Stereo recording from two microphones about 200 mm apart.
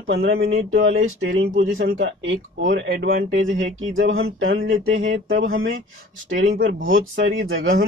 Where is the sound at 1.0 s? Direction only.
90° right.